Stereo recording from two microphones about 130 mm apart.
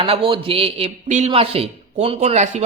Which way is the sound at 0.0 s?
45° right (ahead or behind).